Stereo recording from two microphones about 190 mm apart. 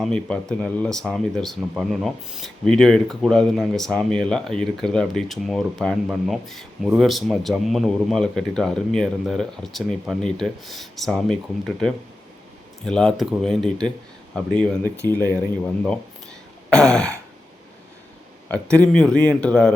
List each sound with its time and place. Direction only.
0.0 s speech: 5° left (ahead or behind)
16.6 s throat clearing: 5° left (ahead or behind)
18.4 s speech: 5° left (ahead or behind)